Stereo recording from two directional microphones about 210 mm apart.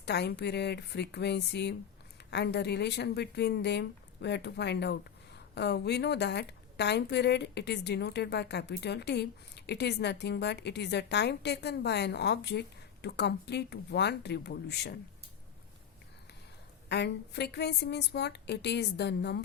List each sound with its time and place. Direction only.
0.0 s a woman's voice: 50° left (ahead or behind)
16.9 s a woman's voice: 55° left (ahead or behind)